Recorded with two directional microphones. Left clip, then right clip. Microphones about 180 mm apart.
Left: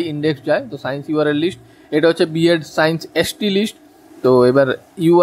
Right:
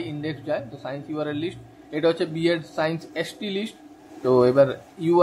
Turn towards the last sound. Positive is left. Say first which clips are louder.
# left 8 dB
turn(degrees=40)  # may be behind; listen again after turning